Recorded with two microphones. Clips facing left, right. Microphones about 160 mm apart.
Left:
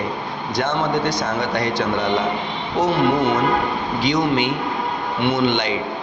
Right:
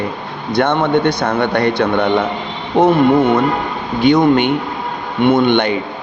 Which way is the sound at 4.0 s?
55° right (ahead or behind).